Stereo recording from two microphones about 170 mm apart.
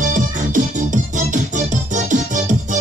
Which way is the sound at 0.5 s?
50° right (ahead or behind).